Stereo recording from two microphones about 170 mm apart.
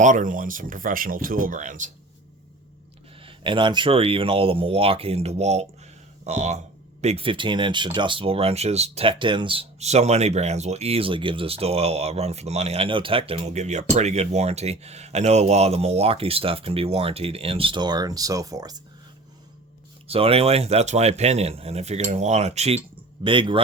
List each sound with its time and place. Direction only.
0.0 s speech: 50° right (ahead or behind)
3.2 s speech: 30° right (ahead or behind)
20.1 s speech: 35° right (ahead or behind)
23.2 s speech: 30° right (ahead or behind)